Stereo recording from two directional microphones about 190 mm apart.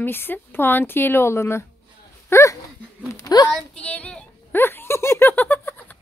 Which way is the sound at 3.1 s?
20° left (ahead or behind).